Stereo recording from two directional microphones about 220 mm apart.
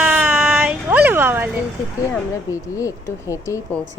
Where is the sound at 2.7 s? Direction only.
15° left (ahead or behind).